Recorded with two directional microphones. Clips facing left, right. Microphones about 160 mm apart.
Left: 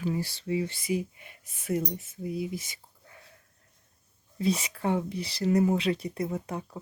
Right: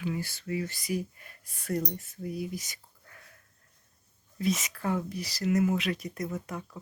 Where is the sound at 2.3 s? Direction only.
25° left (ahead or behind).